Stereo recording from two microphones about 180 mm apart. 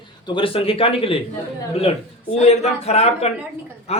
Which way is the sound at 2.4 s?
35° left (ahead or behind).